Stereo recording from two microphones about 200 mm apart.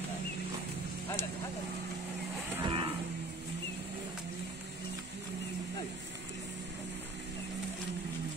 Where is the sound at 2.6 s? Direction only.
25° right (ahead or behind).